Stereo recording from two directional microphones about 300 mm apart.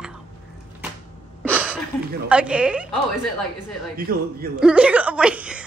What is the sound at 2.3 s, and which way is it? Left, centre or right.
Speech, centre.